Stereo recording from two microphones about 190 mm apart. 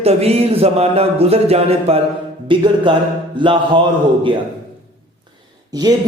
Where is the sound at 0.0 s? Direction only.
30° right (ahead or behind).